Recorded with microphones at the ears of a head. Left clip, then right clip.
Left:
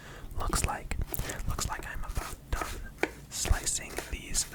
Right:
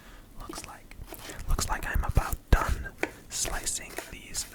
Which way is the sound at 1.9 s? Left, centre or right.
Right.